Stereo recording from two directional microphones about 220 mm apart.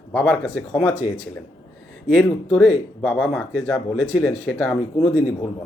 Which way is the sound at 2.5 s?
5° left (ahead or behind).